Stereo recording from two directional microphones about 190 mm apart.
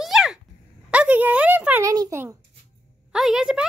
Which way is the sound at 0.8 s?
5° right (ahead or behind).